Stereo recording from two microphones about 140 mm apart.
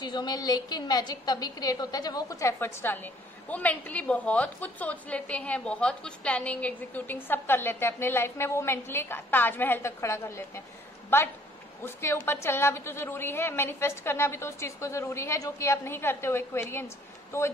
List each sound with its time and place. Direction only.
0.0 s a woman's voice: 30° left (ahead or behind)
11.8 s a woman's voice: 20° left (ahead or behind)